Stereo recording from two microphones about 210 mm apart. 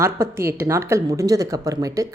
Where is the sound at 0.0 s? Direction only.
10° right (ahead or behind).